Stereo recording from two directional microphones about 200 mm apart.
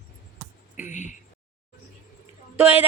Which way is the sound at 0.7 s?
40° left (ahead or behind).